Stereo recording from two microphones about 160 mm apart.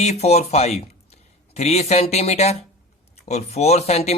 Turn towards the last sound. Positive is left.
turn(degrees=40)  # may be behind; listen again after turning